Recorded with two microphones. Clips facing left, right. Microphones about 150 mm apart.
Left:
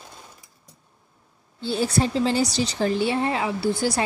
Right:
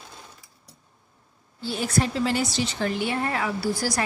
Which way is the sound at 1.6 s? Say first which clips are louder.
Left 3 dB; 30° left (ahead or behind).